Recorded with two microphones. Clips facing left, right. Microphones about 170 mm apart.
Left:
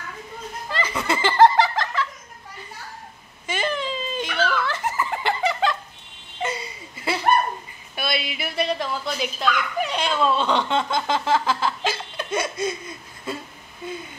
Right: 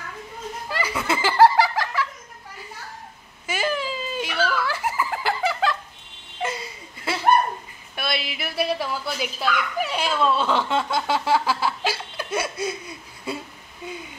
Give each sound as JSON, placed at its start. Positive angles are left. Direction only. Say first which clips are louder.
{"t": 0.7, "sound": "snicker", "louder": "left 1 dB", "side_deg": -10}
{"t": 3.4, "sound": "giggle", "louder": "even", "side_deg": -5}
{"t": 6.4, "sound": "a sound", "louder": "left 1 dB", "side_deg": 0}
{"t": 7.9, "sound": "dog", "louder": "left 1 dB", "side_deg": 0}